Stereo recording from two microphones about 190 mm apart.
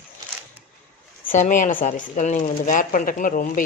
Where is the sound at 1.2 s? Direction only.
40° left (ahead or behind).